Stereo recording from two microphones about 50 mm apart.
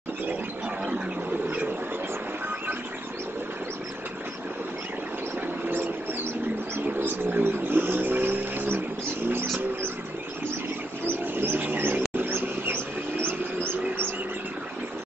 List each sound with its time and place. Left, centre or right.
6.8 s vehicle: right
11.1 s a sound: right
12.2 s mouse: right